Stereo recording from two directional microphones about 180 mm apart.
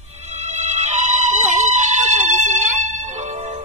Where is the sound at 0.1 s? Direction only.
40° right (ahead or behind).